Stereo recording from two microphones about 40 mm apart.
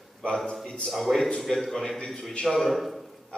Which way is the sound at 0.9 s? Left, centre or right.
Centre.